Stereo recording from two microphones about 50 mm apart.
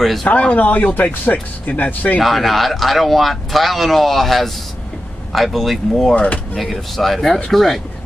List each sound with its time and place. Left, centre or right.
0.3 s speech: left
2.1 s speech: centre
6.1 s speech: left
6.5 s speech: centre